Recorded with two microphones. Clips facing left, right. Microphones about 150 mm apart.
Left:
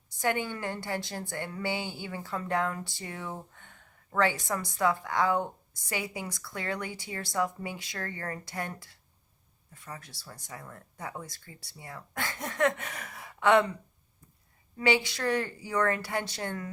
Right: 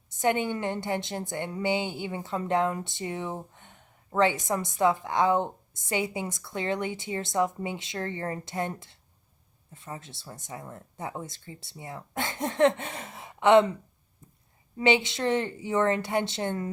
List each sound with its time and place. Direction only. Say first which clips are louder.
0.1 s a woman's voice: right 4 dB; 20° right (ahead or behind)
14.8 s a woman's voice: right 3 dB; 20° right (ahead or behind)